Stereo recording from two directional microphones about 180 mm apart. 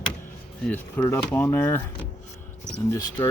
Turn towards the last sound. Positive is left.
turn(degrees=10)  # may be behind; listen again after turning